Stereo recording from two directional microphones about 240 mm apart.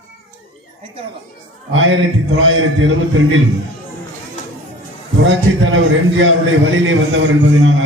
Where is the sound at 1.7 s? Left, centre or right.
Right.